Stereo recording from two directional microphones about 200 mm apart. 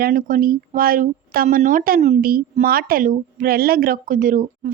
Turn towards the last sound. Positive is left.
turn(degrees=-45)  # may be behind; listen again after turning